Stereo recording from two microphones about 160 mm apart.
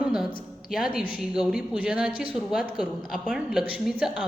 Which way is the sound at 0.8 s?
65° left (ahead or behind).